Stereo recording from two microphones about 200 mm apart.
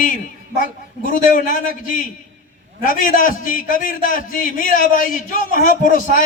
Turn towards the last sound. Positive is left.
turn(degrees=40)  # may be behind; listen again after turning